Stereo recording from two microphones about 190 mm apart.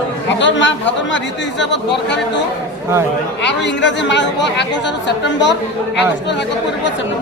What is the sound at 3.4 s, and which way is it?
A woman's voice, 70° left (ahead or behind).